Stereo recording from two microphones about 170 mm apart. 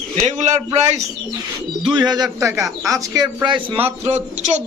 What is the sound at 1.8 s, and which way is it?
A man's voice, 25° right (ahead or behind).